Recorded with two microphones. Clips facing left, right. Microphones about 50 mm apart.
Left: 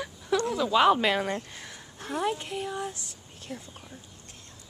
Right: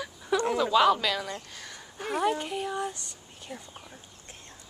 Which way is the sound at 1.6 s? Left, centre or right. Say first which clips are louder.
Even; centre.